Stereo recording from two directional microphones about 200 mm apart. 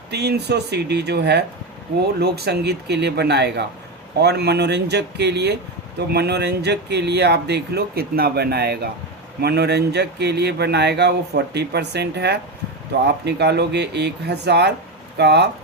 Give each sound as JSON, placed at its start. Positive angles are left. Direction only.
{"t": 0.1, "sound": "speech", "side_deg": -55}